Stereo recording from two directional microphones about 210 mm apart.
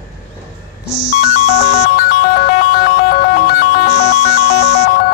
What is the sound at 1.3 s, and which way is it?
Ringtone, 45° left (ahead or behind).